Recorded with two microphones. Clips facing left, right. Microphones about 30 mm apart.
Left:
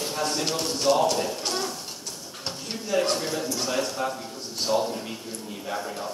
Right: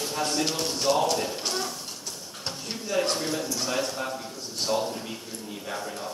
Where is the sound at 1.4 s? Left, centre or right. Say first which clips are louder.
Left 1 dB; centre.